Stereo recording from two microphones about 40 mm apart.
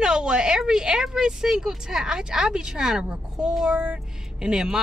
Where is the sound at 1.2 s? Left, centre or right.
Centre.